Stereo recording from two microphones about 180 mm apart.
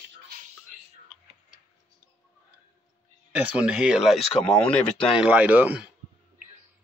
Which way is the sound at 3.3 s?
5° right (ahead or behind).